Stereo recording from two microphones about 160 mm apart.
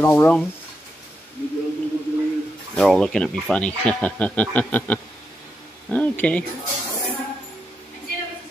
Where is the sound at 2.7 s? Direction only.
5° left (ahead or behind).